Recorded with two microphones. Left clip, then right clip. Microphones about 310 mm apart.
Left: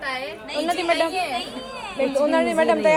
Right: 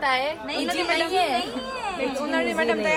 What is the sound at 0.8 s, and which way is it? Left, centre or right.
Speech, right.